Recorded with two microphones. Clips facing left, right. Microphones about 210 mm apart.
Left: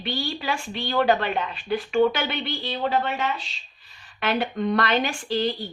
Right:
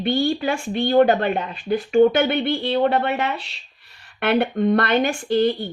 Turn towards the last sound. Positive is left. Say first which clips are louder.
# right 6 dB
turn(degrees=-55)  # may be behind; listen again after turning